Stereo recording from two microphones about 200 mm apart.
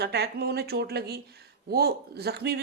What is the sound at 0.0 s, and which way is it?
Speech, 55° right (ahead or behind).